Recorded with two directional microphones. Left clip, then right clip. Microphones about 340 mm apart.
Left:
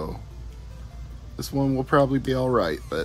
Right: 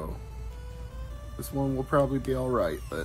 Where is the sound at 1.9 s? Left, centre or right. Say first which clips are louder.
Left 5 dB; centre.